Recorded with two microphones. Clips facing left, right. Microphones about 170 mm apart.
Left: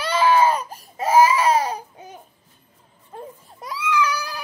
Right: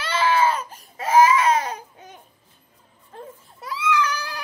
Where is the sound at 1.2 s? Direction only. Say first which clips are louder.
Even; 35° left (ahead or behind).